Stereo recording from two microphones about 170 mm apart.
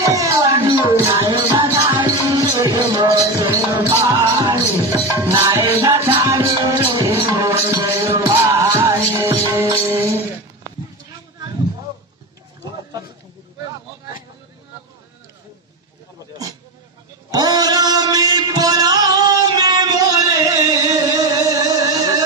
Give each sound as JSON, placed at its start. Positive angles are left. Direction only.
{"t": 0.1, "sound": "music", "side_deg": -20}
{"t": 1.1, "sound": "music", "side_deg": -30}
{"t": 17.3, "sound": "music", "side_deg": -25}